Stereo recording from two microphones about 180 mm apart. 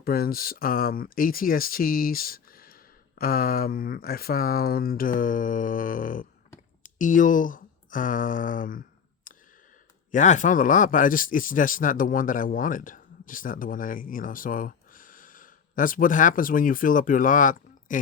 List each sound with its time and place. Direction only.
0.0 s speech: 55° left (ahead or behind)
9.3 s a sound: 50° left (ahead or behind)
10.1 s speech: 45° left (ahead or behind)